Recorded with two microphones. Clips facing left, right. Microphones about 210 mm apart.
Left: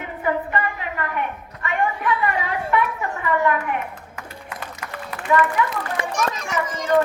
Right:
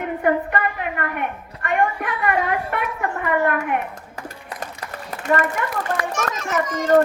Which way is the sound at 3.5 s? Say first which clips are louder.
Left 1 dB; 55° right (ahead or behind).